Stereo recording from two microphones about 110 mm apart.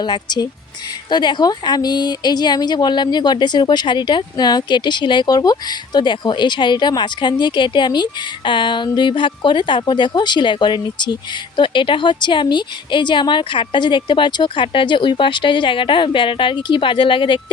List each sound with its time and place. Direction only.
0.0 s a woman's voice: 40° left (ahead or behind)